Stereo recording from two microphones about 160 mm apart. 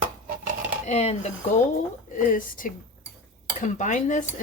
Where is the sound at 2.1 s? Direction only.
55° left (ahead or behind).